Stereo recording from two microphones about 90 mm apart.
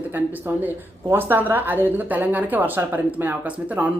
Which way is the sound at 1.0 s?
25° right (ahead or behind).